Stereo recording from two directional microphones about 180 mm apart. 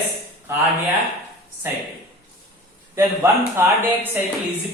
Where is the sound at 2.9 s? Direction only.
15° right (ahead or behind).